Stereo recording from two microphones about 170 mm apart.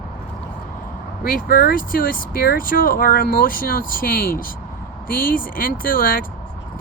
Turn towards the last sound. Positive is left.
turn(degrees=55)  # may be behind; listen again after turning